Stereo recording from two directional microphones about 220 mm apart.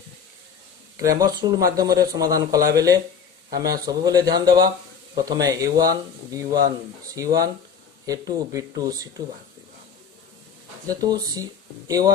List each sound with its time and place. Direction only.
1.4 s speech: 15° right (ahead or behind)
10.9 s speech: 15° right (ahead or behind)